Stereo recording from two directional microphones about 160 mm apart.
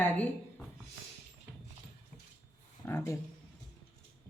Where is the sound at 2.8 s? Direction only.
15° left (ahead or behind).